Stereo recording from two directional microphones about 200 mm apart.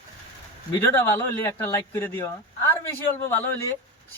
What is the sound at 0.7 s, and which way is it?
Speech, 10° left (ahead or behind).